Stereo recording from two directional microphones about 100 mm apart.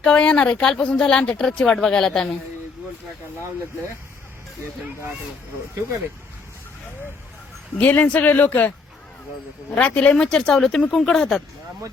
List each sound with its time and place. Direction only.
0.0 s speech: 10° left (ahead or behind)
7.8 s speech: 15° left (ahead or behind)
9.7 s speech: 15° left (ahead or behind)